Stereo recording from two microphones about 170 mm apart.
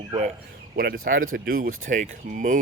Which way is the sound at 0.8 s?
60° right (ahead or behind).